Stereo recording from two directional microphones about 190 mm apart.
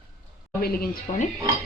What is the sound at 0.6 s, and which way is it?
Speech, 55° left (ahead or behind).